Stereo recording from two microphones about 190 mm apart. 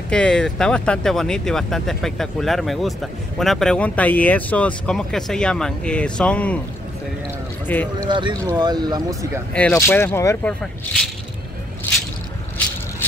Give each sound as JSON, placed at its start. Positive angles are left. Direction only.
{"t": 0.1, "sound": "speech", "side_deg": 5}
{"t": 7.6, "sound": "speech", "side_deg": 10}
{"t": 8.0, "sound": "speech", "side_deg": -25}
{"t": 9.5, "sound": "speech", "side_deg": 5}